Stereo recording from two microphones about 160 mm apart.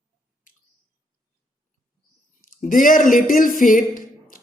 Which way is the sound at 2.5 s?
55° left (ahead or behind).